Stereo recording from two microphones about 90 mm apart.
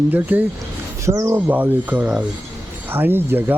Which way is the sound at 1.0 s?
35° right (ahead or behind).